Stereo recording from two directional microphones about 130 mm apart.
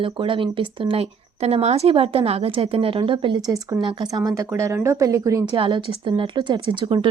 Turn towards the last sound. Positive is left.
turn(degrees=-40)  # may be behind; listen again after turning